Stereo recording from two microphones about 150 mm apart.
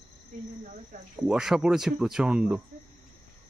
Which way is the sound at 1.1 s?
5° right (ahead or behind).